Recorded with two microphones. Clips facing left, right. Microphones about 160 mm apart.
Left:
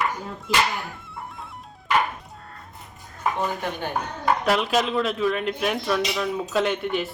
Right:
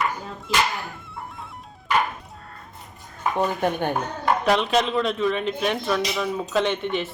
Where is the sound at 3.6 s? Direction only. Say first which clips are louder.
Right 6 dB; 55° right (ahead or behind).